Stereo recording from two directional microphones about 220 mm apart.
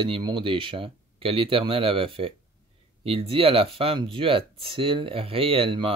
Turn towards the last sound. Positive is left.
turn(degrees=-25)  # may be behind; listen again after turning